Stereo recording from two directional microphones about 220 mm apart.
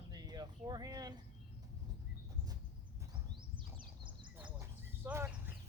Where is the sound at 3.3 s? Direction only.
20° right (ahead or behind).